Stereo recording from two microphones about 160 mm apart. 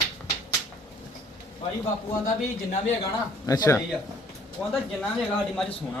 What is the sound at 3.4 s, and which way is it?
Speech, 20° left (ahead or behind).